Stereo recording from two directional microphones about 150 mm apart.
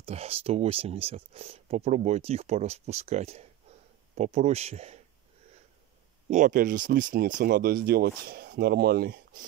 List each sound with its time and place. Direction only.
0.0 s speech: 40° right (ahead or behind)
6.3 s speech: 60° right (ahead or behind)